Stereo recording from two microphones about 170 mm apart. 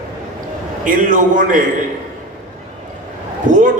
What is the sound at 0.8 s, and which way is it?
Speech, 50° right (ahead or behind).